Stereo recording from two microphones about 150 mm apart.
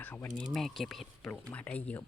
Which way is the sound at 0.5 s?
Centre (ahead or behind).